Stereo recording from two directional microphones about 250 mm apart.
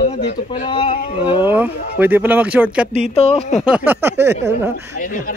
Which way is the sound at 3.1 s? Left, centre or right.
Left.